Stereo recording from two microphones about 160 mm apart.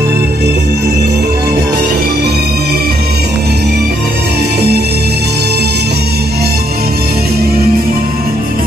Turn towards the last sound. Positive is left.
turn(degrees=-75)  # may be behind; listen again after turning